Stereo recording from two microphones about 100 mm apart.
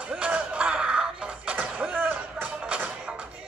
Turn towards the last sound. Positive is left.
turn(degrees=-10)  # may be behind; listen again after turning